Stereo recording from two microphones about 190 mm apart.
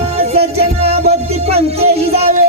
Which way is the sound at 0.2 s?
30° right (ahead or behind).